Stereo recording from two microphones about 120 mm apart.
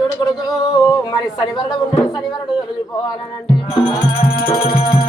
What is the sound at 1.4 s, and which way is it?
Speech, 30° left (ahead or behind).